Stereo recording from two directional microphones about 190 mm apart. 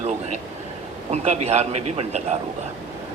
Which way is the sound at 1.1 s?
35° right (ahead or behind).